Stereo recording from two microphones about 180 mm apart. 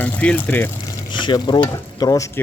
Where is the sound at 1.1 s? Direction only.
25° left (ahead or behind).